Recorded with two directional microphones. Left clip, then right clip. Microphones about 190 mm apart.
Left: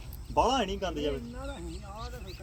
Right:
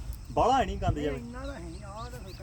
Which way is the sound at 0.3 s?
35° left (ahead or behind).